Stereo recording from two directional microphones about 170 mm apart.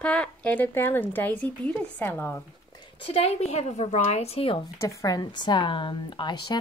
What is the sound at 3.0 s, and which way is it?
Speech, 35° left (ahead or behind).